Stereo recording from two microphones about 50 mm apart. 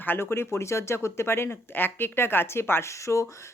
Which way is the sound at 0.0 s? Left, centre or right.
Left.